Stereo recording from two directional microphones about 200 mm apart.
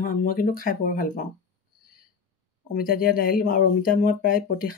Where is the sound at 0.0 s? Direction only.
45° left (ahead or behind).